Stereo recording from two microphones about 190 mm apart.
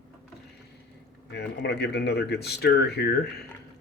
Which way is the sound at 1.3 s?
65° left (ahead or behind).